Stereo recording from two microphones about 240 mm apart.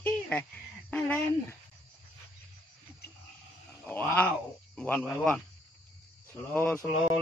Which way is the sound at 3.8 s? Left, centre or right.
Centre.